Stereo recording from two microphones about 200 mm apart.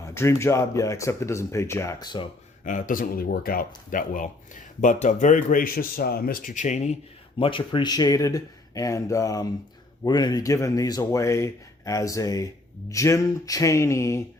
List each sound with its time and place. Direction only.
0.0 s speech: 15° left (ahead or behind)
2.6 s a man's voice: 40° left (ahead or behind)
7.3 s speech: 25° left (ahead or behind)